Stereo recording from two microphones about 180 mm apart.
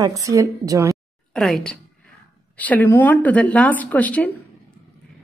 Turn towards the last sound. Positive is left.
turn(degrees=10)  # may be behind; listen again after turning